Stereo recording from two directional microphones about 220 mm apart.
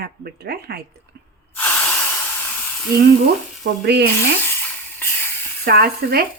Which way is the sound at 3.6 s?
50° right (ahead or behind).